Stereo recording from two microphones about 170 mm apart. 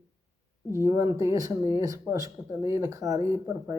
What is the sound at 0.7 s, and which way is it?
Speech, 15° right (ahead or behind).